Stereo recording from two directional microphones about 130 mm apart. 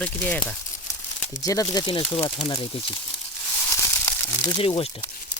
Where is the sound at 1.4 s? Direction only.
30° left (ahead or behind).